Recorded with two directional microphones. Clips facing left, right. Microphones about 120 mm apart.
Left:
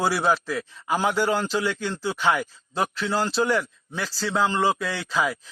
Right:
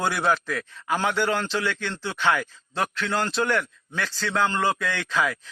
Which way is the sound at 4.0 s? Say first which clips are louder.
Even; 35° left (ahead or behind).